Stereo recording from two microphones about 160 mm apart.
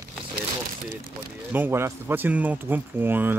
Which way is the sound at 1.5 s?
15° right (ahead or behind).